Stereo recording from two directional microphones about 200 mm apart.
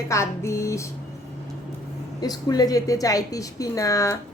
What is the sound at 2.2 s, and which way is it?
A woman's voice, 20° left (ahead or behind).